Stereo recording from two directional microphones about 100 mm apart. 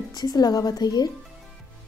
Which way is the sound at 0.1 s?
40° left (ahead or behind).